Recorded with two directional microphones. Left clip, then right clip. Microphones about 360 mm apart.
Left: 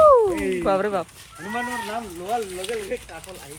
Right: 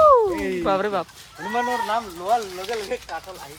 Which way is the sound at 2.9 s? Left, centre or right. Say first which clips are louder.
Right 1 dB; right.